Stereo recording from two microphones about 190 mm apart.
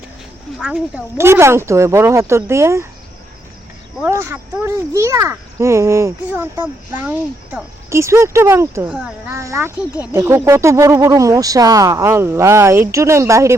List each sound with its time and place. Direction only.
0.6 s a child's voice: 5° right (ahead or behind)
4.0 s a child's voice: 15° right (ahead or behind)